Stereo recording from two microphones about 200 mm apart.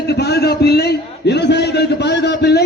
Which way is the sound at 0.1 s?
55° left (ahead or behind).